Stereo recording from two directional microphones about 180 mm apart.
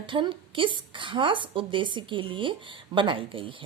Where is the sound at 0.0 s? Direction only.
25° right (ahead or behind).